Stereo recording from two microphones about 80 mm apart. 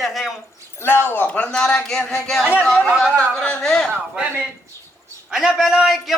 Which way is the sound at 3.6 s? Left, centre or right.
Centre.